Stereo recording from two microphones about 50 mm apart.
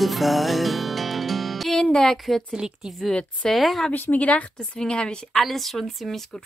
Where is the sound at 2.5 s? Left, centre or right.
Centre.